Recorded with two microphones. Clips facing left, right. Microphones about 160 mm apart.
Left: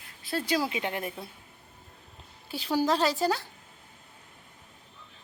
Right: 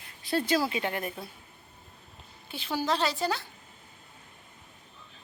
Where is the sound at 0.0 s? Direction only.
Centre (ahead or behind).